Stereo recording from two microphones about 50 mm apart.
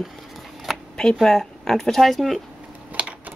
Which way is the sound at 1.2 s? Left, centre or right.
Centre.